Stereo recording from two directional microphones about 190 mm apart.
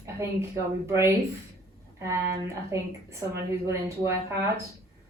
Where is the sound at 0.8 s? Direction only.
15° right (ahead or behind).